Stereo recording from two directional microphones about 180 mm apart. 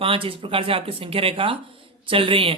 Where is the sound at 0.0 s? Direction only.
30° right (ahead or behind).